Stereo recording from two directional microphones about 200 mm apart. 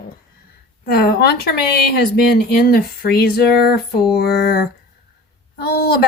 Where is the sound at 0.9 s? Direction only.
50° left (ahead or behind).